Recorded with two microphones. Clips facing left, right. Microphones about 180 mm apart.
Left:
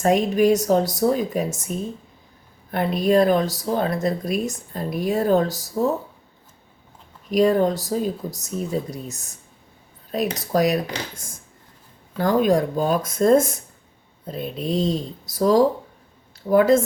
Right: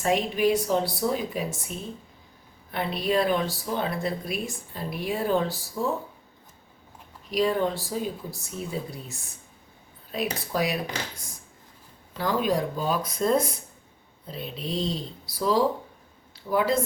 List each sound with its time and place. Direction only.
0.0 s speech: 45° left (ahead or behind)
2.7 s speech: 45° left (ahead or behind)
7.3 s speech: 45° left (ahead or behind)
10.3 s speech: 45° left (ahead or behind)
12.1 s speech: 45° left (ahead or behind)